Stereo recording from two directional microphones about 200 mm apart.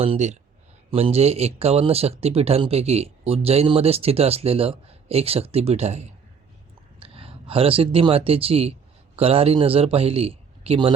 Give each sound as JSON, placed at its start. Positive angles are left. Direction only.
{"t": 0.0, "sound": "a man's voice", "side_deg": -30}